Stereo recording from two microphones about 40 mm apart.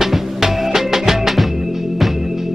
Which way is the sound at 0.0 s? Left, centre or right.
Centre.